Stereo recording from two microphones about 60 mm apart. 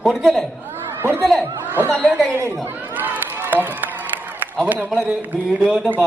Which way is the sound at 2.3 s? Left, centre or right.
Right.